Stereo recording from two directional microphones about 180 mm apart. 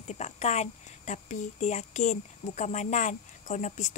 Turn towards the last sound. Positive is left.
turn(degrees=45)  # may be behind; listen again after turning